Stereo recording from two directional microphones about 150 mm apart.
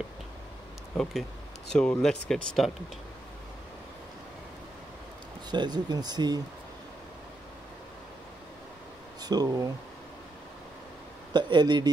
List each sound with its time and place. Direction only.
1.7 s speech: 5° left (ahead or behind)
5.5 s speech: 30° right (ahead or behind)
9.2 s speech: 25° right (ahead or behind)
11.3 s speech: 30° right (ahead or behind)